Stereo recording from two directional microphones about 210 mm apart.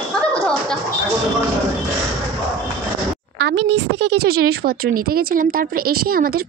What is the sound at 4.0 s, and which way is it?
Speech, 50° right (ahead or behind).